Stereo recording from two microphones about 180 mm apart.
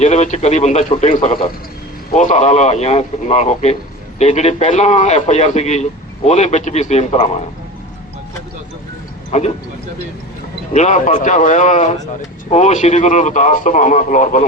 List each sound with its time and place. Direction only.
0.0 s a man's voice: 40° left (ahead or behind)
2.0 s a man's voice: 45° left (ahead or behind)
9.3 s a man's voice: 40° left (ahead or behind)
10.7 s a man's voice: 40° left (ahead or behind)